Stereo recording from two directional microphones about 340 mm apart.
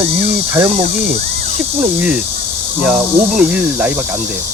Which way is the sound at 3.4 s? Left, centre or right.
Centre.